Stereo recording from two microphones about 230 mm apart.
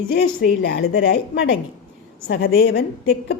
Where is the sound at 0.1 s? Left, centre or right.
Left.